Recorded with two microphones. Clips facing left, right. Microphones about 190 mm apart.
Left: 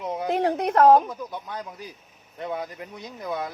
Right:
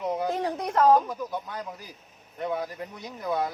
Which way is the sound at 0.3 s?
65° left (ahead or behind).